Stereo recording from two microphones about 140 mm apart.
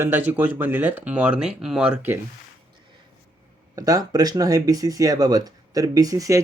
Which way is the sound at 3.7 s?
25° right (ahead or behind).